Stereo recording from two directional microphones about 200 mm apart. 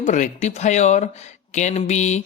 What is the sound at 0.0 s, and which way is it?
Speech, 40° left (ahead or behind).